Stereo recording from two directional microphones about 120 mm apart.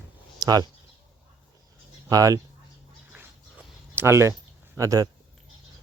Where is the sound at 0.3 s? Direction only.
35° right (ahead or behind).